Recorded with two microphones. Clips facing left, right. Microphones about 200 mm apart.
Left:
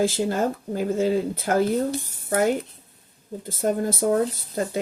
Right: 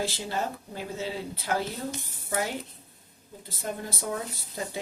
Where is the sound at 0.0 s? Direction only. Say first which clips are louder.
Left 9 dB; 50° left (ahead or behind).